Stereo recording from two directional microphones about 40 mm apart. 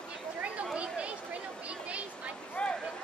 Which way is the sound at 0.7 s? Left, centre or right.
Right.